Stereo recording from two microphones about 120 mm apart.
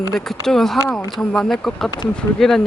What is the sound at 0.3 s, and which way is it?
Speech, 5° left (ahead or behind).